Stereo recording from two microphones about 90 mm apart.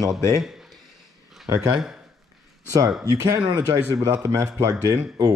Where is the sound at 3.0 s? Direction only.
40° right (ahead or behind).